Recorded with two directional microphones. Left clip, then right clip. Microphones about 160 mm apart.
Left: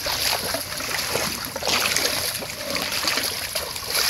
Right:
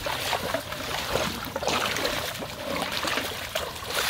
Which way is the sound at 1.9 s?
15° left (ahead or behind).